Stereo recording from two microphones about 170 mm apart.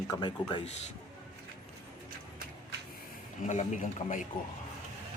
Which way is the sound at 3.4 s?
45° left (ahead or behind).